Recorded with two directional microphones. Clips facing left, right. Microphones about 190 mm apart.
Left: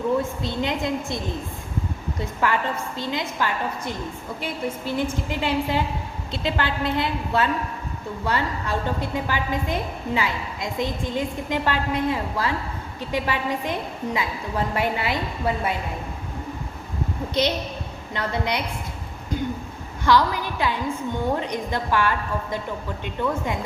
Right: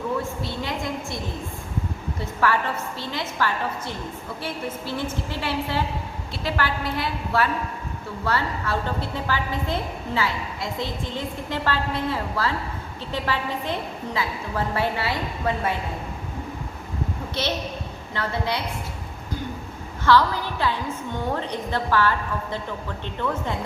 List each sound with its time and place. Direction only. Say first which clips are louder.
0.2 s a woman's voice: left 3 dB; 20° left (ahead or behind)
2.4 s a woman's voice: right 1 dB; 15° left (ahead or behind)
17.4 s a woman's voice: left 4 dB; 15° left (ahead or behind)
20.1 s a woman's voice: even; 15° left (ahead or behind)